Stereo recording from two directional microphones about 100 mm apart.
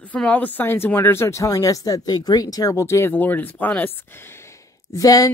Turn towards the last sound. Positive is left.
turn(degrees=35)  # may be behind; listen again after turning